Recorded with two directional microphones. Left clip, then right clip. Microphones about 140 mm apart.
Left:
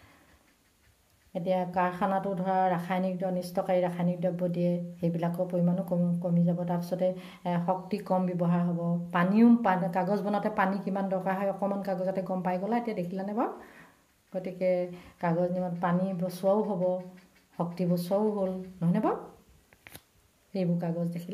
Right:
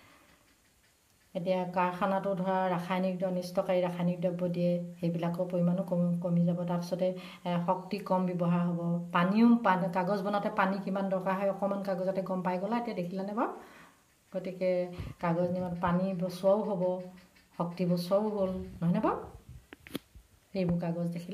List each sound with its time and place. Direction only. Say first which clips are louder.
1.3 s speech: left 2 dB; 45° left (ahead or behind)
20.5 s speech: left 2 dB; 45° left (ahead or behind)